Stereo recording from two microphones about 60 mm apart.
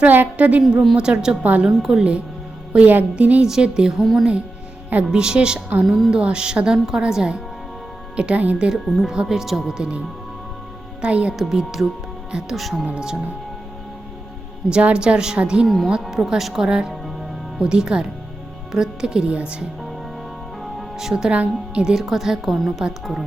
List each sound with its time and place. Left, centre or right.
0.0 s a woman's voice: right
2.7 s speech: right
3.4 s a woman's voice: centre
4.0 s a woman's voice: centre
5.1 s a woman's voice: centre
11.0 s speech: centre
11.3 s a woman's voice: centre
12.5 s a woman's voice: centre
12.8 s a woman's voice: centre
14.7 s a woman's voice: centre
15.6 s a woman's voice: centre
15.9 s a woman's voice: centre
20.6 s music: centre
21.2 s a woman's voice: right; by 23.2 s centre